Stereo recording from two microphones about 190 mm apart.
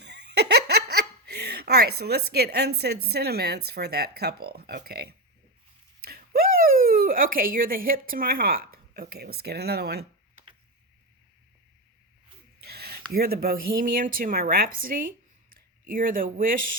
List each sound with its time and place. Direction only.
0.0 s speech: 60° right (ahead or behind)
12.6 s speech: 55° right (ahead or behind)